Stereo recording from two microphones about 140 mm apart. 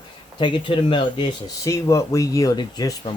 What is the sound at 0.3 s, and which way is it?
Speech, 35° left (ahead or behind).